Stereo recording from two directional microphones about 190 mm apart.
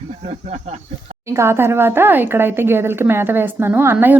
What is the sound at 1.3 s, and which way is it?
A woman's voice, 15° right (ahead or behind).